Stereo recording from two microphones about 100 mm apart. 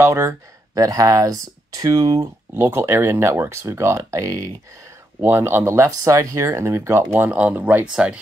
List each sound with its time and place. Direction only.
0.0 s speech: 25° right (ahead or behind)
5.2 s speech: 20° right (ahead or behind)
7.2 s speech: 15° right (ahead or behind)